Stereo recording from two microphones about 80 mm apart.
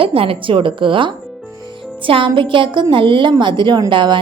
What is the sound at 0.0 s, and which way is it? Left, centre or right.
A woman's voice, right.